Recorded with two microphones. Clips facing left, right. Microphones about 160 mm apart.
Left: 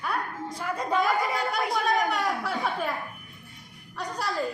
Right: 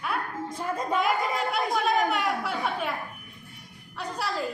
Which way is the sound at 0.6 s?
25° right (ahead or behind).